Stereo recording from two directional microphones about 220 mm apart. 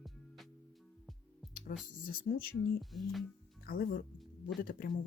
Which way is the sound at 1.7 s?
35° left (ahead or behind).